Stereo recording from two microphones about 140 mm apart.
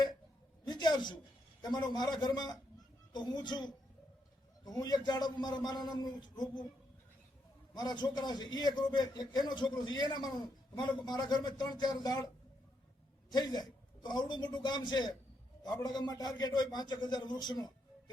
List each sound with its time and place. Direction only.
0.6 s a sound: 30° left (ahead or behind)
1.6 s a man's voice: 30° left (ahead or behind)
7.7 s a man's voice: 30° left (ahead or behind)
13.3 s a man's voice: 30° left (ahead or behind)